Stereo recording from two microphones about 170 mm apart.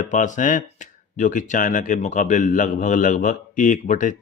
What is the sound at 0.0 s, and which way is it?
Speech, 45° left (ahead or behind).